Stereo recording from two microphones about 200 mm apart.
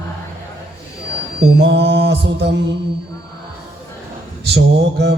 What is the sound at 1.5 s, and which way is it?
Mantra, 55° right (ahead or behind).